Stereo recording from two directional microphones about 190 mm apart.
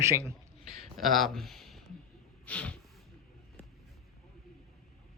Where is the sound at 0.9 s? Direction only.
Centre (ahead or behind).